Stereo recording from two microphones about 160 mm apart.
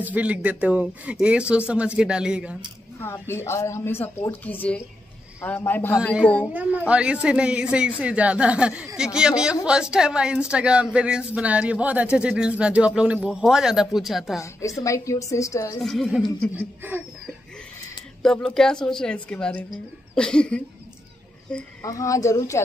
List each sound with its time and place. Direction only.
0.0 s speech: 10° right (ahead or behind)
3.0 s speech: 15° left (ahead or behind)
6.9 s speech: 5° right (ahead or behind)
14.4 s a woman's voice: 20° left (ahead or behind)
15.8 s speech: centre (ahead or behind)
16.5 s speech: 10° right (ahead or behind)
18.2 s speech: 5° left (ahead or behind)
21.8 s a woman's voice: 20° left (ahead or behind)